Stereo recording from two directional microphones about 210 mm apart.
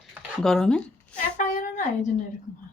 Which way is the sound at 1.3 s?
35° left (ahead or behind).